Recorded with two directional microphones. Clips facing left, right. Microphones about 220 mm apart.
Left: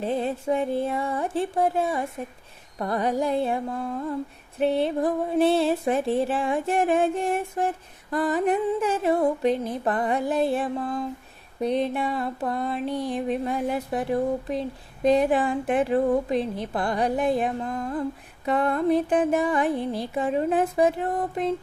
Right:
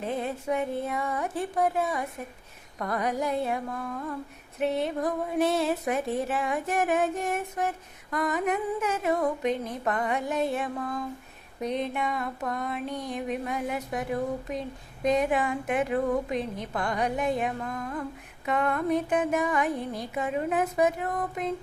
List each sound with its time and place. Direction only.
0.0 s music: 30° left (ahead or behind)